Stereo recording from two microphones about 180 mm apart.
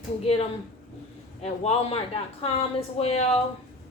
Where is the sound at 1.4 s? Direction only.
35° left (ahead or behind).